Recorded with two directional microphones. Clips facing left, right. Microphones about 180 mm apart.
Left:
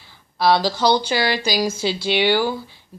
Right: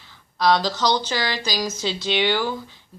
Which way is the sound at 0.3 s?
10° left (ahead or behind).